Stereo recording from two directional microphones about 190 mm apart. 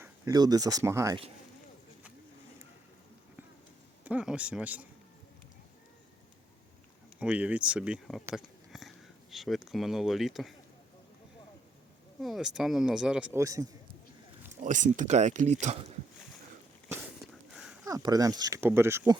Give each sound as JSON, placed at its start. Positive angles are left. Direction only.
{"t": 0.0, "sound": "speech", "side_deg": -20}
{"t": 4.0, "sound": "speech", "side_deg": -5}
{"t": 7.2, "sound": "speech", "side_deg": -5}
{"t": 8.4, "sound": "a sound", "side_deg": 0}
{"t": 9.3, "sound": "speech", "side_deg": 0}
{"t": 12.2, "sound": "speech", "side_deg": 0}
{"t": 14.6, "sound": "speech", "side_deg": -40}
{"t": 17.5, "sound": "a sound", "side_deg": -5}
{"t": 17.8, "sound": "speech", "side_deg": -20}